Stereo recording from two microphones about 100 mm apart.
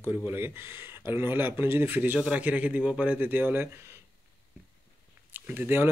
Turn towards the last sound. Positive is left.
turn(degrees=-20)  # may be behind; listen again after turning